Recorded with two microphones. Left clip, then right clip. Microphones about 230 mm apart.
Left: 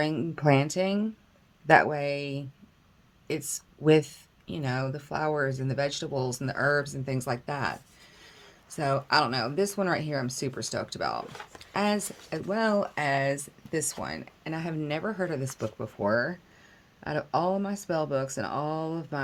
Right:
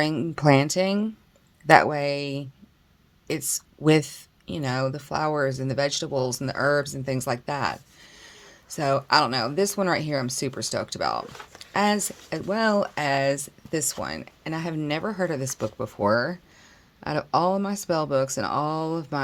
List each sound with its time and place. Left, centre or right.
0.0 s speech: right